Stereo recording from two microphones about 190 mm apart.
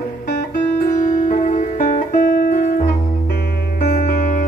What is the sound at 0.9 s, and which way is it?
Music, 40° left (ahead or behind).